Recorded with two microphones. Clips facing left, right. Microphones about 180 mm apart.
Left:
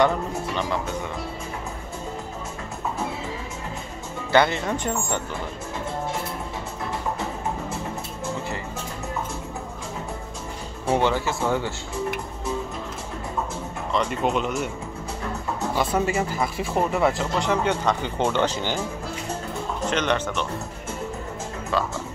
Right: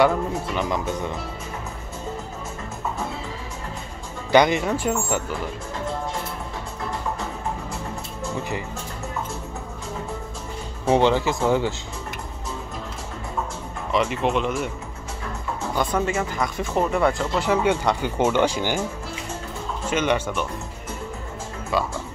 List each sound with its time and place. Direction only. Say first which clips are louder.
4.3 s speech: right 3 dB; 15° right (ahead or behind)
10.9 s speech: right 4 dB; 20° right (ahead or behind)
13.9 s speech: right 2 dB; 5° right (ahead or behind)
15.7 s speech: even; 5° left (ahead or behind); by 18.8 s 10° right (ahead or behind)
19.9 s speech: right 3 dB; 10° right (ahead or behind)
21.7 s speech: right 1 dB; 10° right (ahead or behind)